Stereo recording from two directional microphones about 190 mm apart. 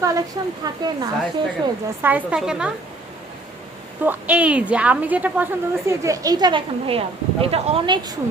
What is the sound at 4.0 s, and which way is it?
Speech, 10° right (ahead or behind).